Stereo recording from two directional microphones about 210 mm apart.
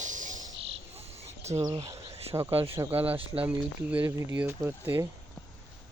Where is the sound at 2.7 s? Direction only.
10° right (ahead or behind).